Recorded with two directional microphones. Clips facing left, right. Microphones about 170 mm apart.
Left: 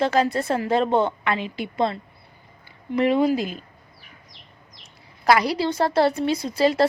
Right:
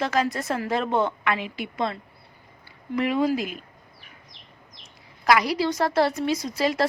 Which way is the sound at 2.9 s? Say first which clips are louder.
Left 4 dB; 30° left (ahead or behind).